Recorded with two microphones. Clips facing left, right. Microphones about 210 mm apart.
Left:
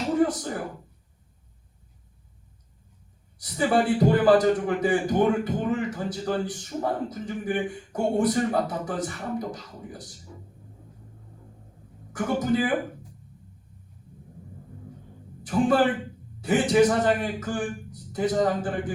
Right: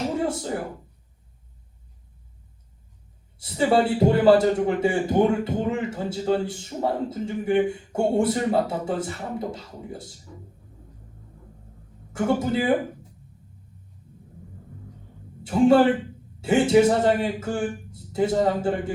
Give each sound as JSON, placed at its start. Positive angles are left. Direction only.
{"t": 0.3, "sound": "a sound", "side_deg": -25}
{"t": 3.3, "sound": "a man's voice", "side_deg": -25}
{"t": 12.1, "sound": "a man's voice", "side_deg": -25}
{"t": 15.4, "sound": "a man's voice", "side_deg": -25}